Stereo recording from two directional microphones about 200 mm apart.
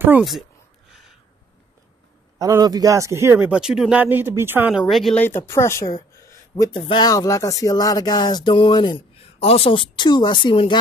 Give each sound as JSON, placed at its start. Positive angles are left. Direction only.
{"t": 0.0, "sound": "speech", "side_deg": -5}
{"t": 2.3, "sound": "a man's voice", "side_deg": -20}